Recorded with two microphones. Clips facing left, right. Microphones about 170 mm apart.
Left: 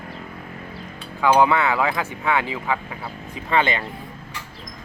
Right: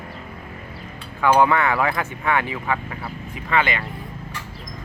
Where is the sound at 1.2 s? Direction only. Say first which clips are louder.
Even; 15° left (ahead or behind).